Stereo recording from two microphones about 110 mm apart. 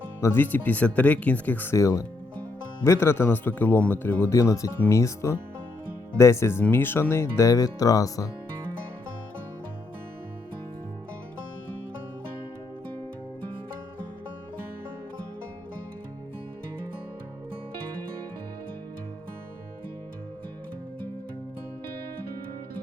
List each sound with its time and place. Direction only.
0.2 s speech: 20° left (ahead or behind)
1.7 s speech: 30° left (ahead or behind)